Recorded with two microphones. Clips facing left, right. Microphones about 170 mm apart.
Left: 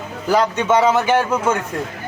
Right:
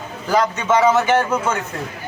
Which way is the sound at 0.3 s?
10° left (ahead or behind).